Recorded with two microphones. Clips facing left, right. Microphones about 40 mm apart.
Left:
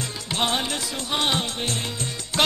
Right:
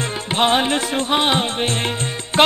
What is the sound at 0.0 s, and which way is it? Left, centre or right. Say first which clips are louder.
Music: right 7 dB; right.